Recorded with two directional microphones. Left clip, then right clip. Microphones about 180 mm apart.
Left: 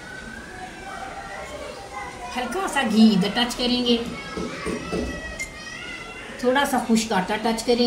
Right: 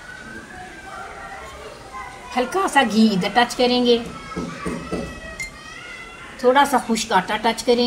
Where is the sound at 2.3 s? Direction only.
15° right (ahead or behind).